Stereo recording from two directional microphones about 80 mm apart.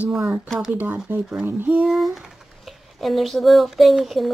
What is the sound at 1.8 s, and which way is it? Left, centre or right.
Speech, centre.